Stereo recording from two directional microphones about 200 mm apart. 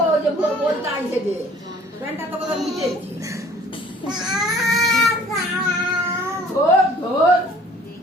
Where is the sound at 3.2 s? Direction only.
15° right (ahead or behind).